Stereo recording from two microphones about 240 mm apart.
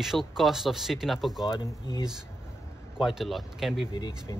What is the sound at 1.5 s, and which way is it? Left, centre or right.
Speech, centre.